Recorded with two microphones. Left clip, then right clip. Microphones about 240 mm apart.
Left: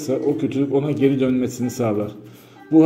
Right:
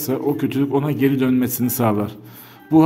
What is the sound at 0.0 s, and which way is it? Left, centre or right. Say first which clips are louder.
A man's voice: even; right.